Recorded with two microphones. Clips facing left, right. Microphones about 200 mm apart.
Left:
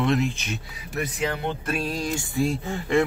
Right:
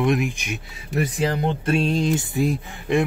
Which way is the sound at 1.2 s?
35° right (ahead or behind).